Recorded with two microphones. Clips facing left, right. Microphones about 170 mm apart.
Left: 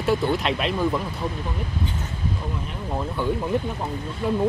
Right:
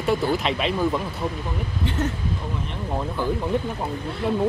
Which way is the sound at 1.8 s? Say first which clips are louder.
Right 6 dB; 70° right (ahead or behind).